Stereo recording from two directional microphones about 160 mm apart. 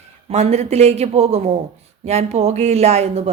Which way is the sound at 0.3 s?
40° right (ahead or behind).